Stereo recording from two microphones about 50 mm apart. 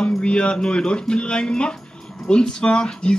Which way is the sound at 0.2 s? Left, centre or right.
Left.